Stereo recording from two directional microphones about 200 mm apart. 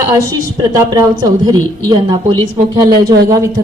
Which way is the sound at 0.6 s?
15° right (ahead or behind).